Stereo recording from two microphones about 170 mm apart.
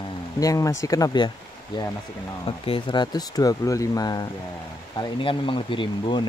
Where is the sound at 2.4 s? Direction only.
30° left (ahead or behind).